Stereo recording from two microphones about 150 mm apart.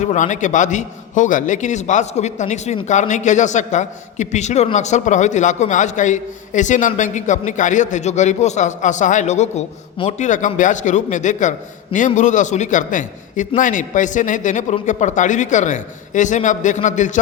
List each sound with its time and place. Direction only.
0.0 s a man's voice: 55° left (ahead or behind)